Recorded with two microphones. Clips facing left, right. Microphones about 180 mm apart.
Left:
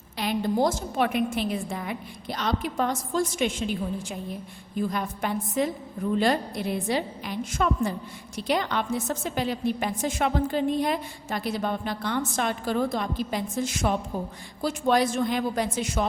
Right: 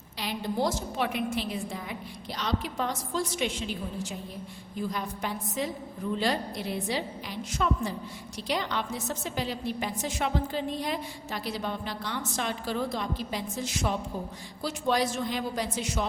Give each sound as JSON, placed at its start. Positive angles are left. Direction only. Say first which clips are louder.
{"t": 0.2, "sound": "a woman's voice", "louder": "left 5 dB", "side_deg": 50}